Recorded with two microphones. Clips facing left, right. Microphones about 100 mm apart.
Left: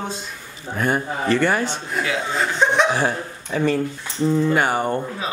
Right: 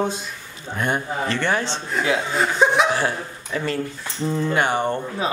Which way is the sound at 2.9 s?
15° left (ahead or behind).